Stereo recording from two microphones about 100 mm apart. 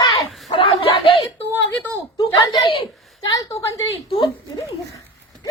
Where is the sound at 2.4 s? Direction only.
55° left (ahead or behind).